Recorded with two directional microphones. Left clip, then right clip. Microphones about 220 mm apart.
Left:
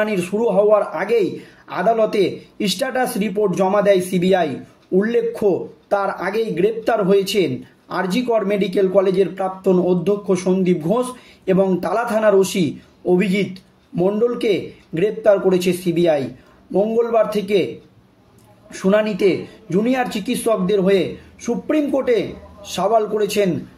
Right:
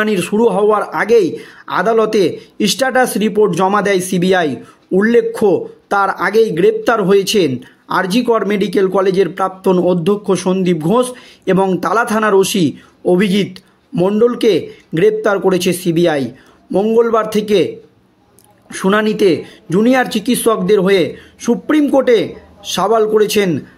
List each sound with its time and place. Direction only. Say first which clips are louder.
0.0 s speech: right 6 dB; 45° right (ahead or behind)
18.7 s speech: right 3 dB; 45° right (ahead or behind)